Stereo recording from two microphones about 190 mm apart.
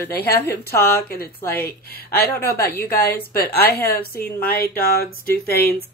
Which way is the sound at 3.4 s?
55° left (ahead or behind).